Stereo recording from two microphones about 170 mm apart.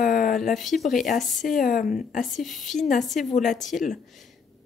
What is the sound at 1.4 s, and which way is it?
Speech, 50° left (ahead or behind).